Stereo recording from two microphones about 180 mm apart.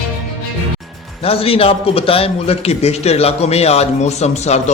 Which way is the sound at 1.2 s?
30° left (ahead or behind).